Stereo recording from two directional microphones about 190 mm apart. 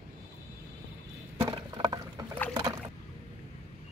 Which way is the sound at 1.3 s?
20° right (ahead or behind).